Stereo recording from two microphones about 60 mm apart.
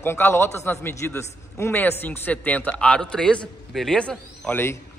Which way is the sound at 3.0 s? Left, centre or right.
Centre.